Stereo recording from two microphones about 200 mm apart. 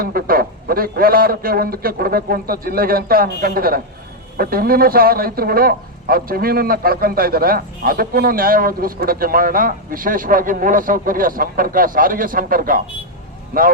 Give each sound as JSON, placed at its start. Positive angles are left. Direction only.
{"t": 0.0, "sound": "a man's voice", "side_deg": -50}